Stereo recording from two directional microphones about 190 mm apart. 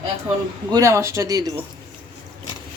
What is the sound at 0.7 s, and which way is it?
Speech, 15° right (ahead or behind).